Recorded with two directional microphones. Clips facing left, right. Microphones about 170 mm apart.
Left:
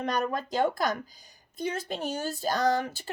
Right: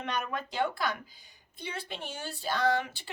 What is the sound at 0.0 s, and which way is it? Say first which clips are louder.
Speech: left 5 dB; 35° left (ahead or behind).